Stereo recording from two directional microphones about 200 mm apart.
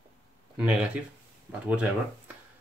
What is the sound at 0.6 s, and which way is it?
Speech, 5° right (ahead or behind).